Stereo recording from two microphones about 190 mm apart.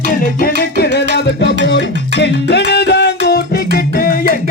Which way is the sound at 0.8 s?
60° left (ahead or behind).